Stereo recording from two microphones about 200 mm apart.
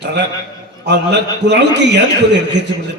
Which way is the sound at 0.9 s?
60° right (ahead or behind).